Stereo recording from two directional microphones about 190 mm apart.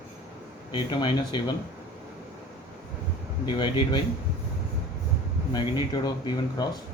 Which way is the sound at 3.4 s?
25° left (ahead or behind).